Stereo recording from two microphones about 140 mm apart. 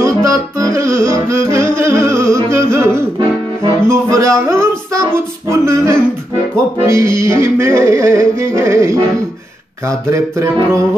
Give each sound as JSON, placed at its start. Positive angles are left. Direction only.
{"t": 0.0, "sound": "music", "side_deg": -25}